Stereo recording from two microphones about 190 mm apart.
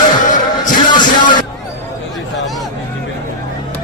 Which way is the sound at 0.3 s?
40° left (ahead or behind).